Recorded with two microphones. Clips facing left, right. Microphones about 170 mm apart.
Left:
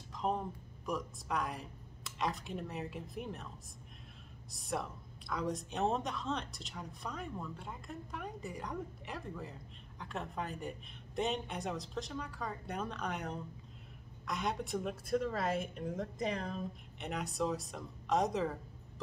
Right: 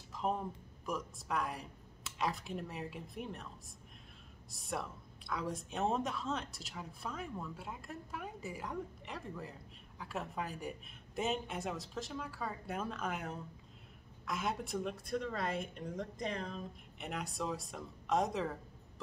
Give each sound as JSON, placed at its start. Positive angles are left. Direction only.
{"t": 0.1, "sound": "a sound", "side_deg": 0}
{"t": 0.8, "sound": "a woman's voice", "side_deg": 0}
{"t": 4.5, "sound": "a woman's voice", "side_deg": 0}